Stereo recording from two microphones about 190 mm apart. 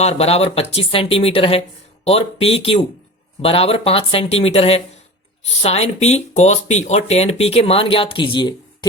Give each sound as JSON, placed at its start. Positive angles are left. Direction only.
{"t": 0.0, "sound": "speech", "side_deg": 35}